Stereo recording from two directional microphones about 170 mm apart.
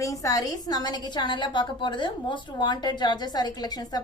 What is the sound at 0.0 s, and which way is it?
A woman's voice, 20° left (ahead or behind).